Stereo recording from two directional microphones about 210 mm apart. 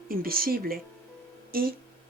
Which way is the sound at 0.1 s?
45° right (ahead or behind).